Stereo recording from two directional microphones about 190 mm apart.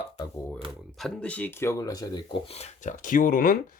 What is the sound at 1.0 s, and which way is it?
Speech, 5° left (ahead or behind).